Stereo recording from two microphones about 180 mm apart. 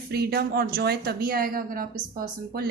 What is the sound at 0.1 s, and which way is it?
A woman's voice, 60° right (ahead or behind).